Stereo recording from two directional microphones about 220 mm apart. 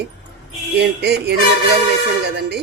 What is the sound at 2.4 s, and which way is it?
Speech, 50° right (ahead or behind).